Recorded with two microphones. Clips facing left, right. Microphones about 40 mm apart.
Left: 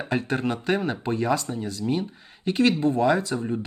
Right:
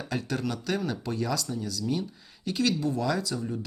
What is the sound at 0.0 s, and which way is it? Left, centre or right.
Speech, left.